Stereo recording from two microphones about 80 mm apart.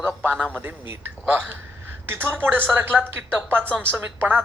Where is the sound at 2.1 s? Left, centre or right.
Right.